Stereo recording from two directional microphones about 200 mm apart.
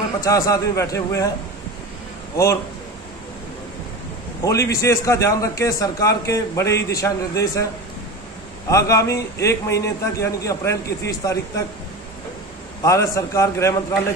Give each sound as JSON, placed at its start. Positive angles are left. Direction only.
{"t": 0.2, "sound": "a man's voice", "side_deg": 15}
{"t": 2.3, "sound": "a man's voice", "side_deg": 15}
{"t": 4.5, "sound": "a man's voice", "side_deg": 15}
{"t": 8.6, "sound": "a man's voice", "side_deg": 15}
{"t": 12.8, "sound": "a man's voice", "side_deg": 15}